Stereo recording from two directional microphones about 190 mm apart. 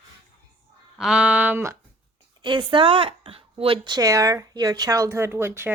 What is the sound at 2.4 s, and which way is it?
Speech, 25° right (ahead or behind).